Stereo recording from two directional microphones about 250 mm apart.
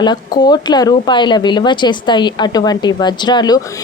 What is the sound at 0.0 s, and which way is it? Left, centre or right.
A woman's voice, centre.